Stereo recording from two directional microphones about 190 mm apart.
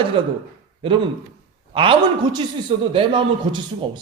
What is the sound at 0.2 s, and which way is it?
Speech, 25° right (ahead or behind).